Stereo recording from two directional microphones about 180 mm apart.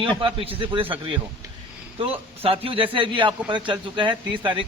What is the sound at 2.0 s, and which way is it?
Speech, 30° right (ahead or behind).